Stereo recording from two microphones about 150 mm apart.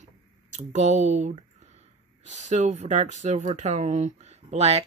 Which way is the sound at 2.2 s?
50° right (ahead or behind).